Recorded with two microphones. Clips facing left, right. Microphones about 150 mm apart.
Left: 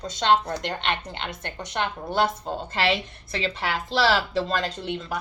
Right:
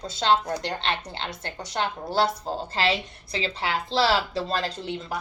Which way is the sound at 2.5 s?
35° right (ahead or behind).